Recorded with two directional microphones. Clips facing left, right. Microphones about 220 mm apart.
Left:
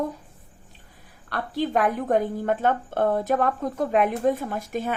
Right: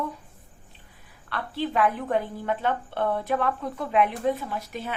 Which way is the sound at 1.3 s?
45° left (ahead or behind).